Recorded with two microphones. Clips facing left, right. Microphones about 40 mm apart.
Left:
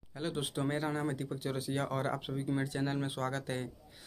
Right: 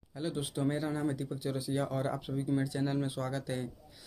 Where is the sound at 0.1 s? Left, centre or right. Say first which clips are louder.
Even; left.